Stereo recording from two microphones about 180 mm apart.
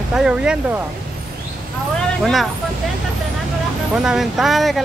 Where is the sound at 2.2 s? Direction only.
Centre (ahead or behind).